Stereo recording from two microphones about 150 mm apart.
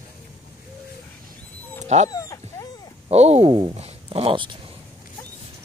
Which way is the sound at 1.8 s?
50° right (ahead or behind).